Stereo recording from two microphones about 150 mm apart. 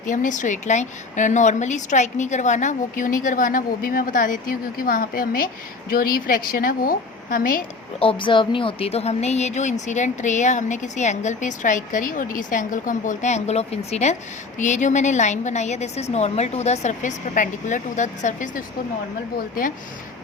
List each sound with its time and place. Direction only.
0.0 s a woman's voice: 55° left (ahead or behind)
7.9 s a woman's voice: 35° left (ahead or behind); by 18.6 s 60° left (ahead or behind)